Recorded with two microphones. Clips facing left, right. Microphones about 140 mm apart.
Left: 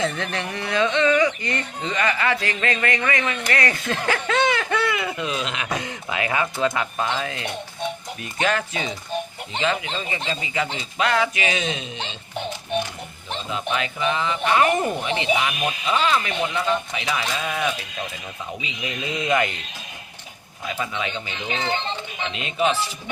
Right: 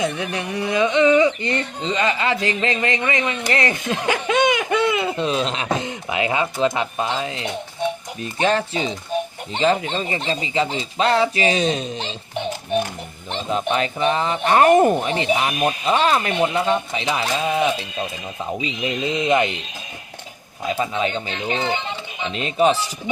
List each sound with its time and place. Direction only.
0.0 s speech: 15° right (ahead or behind)
8.2 s speech: 30° right (ahead or behind)
13.5 s speech: 35° right (ahead or behind)
18.8 s speech: 25° right (ahead or behind)
20.7 s speech: 35° right (ahead or behind)